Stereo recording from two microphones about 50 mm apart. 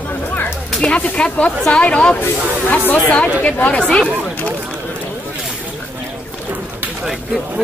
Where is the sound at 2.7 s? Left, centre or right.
Left.